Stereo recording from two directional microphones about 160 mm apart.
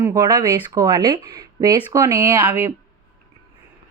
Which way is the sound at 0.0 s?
20° right (ahead or behind).